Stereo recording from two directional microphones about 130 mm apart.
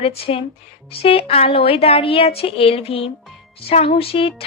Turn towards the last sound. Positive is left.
turn(degrees=45)  # may be behind; listen again after turning